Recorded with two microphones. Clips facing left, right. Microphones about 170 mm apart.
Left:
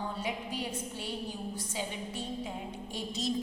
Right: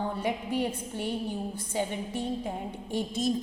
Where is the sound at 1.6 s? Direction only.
55° right (ahead or behind).